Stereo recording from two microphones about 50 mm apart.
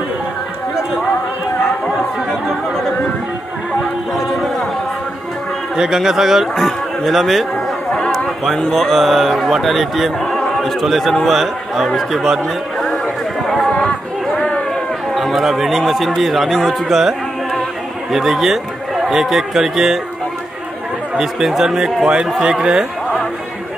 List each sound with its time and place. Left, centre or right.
5.8 s a man's voice: centre
8.7 s a man's voice: centre
13.0 s chatter: centre
13.7 s chatter: centre
15.1 s a man's voice: centre
21.2 s a man's voice: centre